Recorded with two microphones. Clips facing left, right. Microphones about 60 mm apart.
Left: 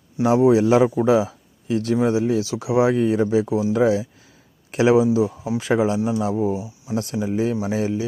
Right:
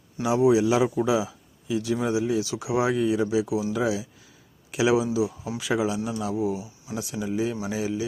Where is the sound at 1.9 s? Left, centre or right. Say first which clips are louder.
Left 6 dB; left.